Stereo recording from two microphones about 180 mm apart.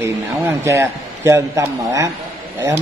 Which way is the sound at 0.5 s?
15° right (ahead or behind).